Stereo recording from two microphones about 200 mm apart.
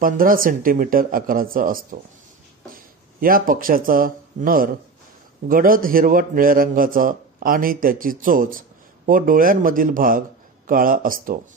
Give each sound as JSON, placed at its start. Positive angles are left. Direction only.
{"t": 0.0, "sound": "a man's voice", "side_deg": -45}